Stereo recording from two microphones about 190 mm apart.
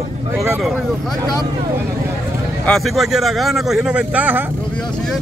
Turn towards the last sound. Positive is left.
turn(degrees=-5)  # may be behind; listen again after turning